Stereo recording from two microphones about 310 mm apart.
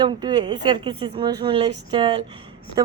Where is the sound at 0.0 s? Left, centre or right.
Centre.